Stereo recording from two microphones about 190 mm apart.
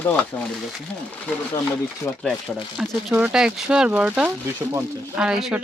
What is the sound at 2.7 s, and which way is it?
Speech, 5° right (ahead or behind).